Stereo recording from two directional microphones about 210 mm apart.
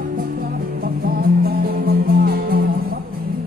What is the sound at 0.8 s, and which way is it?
Music, 45° right (ahead or behind).